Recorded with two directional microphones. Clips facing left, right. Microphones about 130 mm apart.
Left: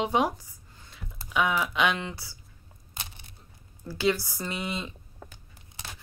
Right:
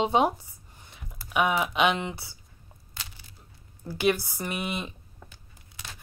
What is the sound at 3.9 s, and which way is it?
Speech, 15° right (ahead or behind).